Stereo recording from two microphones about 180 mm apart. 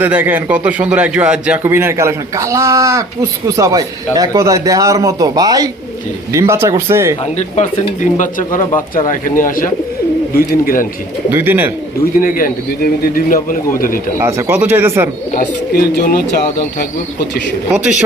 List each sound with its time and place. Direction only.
0.0 s a man's voice: 10° right (ahead or behind)
7.3 s a man's voice: 40° left (ahead or behind)
11.3 s a man's voice: 10° right (ahead or behind)
12.2 s a man's voice: 50° left (ahead or behind)
14.2 s a man's voice: 15° right (ahead or behind)
15.4 s speech: 55° left (ahead or behind)
17.7 s a man's voice: 5° right (ahead or behind)